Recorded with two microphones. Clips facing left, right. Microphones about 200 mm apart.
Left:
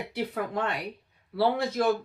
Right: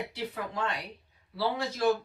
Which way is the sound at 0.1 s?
60° left (ahead or behind).